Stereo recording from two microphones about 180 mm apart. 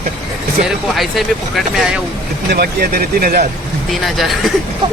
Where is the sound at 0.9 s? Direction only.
Centre (ahead or behind).